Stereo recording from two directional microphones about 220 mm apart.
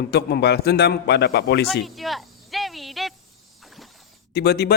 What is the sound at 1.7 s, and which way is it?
Cricket, centre (ahead or behind).